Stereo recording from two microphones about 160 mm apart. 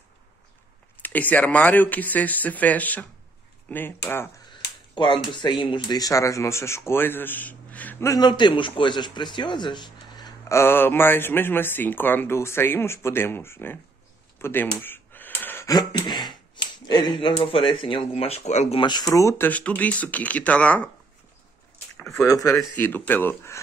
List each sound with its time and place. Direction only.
0.9 s speech: 10° left (ahead or behind)
4.9 s speech: 30° left (ahead or behind)
18.8 s speech: 25° left (ahead or behind); by 20.9 s 10° left (ahead or behind)
21.9 s speech: 10° left (ahead or behind)